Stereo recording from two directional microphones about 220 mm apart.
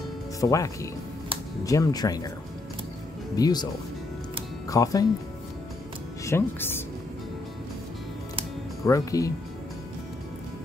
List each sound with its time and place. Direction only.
0.4 s speech: 15° left (ahead or behind)
3.3 s speech: 15° left (ahead or behind)
4.6 s speech: 15° left (ahead or behind)
6.2 s speech: 10° left (ahead or behind)
8.8 s speech: 15° left (ahead or behind)